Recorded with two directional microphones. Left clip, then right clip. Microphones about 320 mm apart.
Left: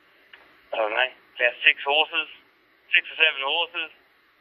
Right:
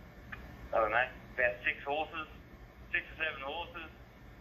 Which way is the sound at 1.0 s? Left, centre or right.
Centre.